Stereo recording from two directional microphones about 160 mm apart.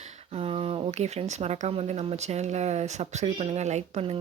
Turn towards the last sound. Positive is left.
turn(degrees=-40)  # may be behind; listen again after turning